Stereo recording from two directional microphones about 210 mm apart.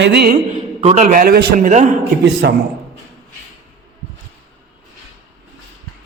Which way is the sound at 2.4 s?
55° right (ahead or behind).